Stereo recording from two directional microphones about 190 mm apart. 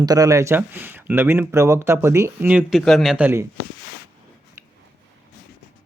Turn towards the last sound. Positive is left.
turn(degrees=-15)  # may be behind; listen again after turning